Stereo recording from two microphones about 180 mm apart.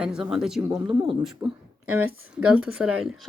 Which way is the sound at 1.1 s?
10° right (ahead or behind).